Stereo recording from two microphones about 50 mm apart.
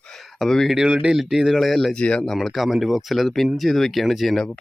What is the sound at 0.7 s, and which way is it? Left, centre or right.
Speech, centre.